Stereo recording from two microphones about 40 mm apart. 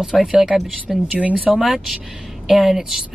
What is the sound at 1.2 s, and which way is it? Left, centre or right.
Speech, right.